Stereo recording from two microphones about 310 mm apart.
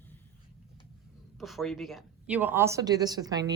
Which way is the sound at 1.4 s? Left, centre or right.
Centre.